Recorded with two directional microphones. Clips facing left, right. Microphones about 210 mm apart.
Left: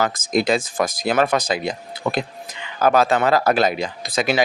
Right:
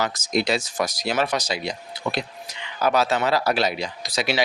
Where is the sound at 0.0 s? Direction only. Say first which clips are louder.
Left 4 dB; 50° left (ahead or behind).